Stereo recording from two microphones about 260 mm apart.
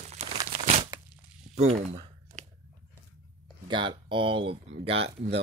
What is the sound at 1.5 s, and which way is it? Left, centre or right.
Speech, right.